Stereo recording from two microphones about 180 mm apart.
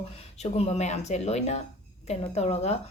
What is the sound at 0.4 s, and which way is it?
A woman's voice, 35° left (ahead or behind).